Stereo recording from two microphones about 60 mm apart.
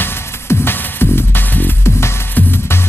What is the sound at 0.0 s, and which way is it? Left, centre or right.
Music, left.